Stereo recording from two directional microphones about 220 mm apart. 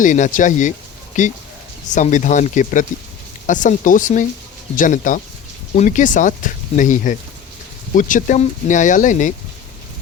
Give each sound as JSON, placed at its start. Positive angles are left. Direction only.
{"t": 0.0, "sound": "speech", "side_deg": 35}